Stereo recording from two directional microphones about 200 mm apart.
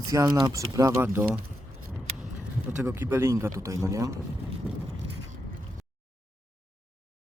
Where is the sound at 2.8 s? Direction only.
10° right (ahead or behind).